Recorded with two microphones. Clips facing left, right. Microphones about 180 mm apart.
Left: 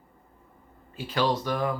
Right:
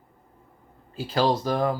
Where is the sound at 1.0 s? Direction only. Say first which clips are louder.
Right 3 dB; 35° right (ahead or behind).